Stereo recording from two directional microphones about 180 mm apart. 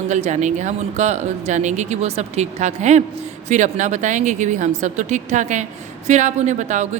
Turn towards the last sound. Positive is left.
turn(degrees=-40)  # may be behind; listen again after turning